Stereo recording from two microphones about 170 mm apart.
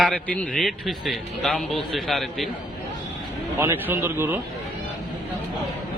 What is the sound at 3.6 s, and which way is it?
Speech, 15° right (ahead or behind).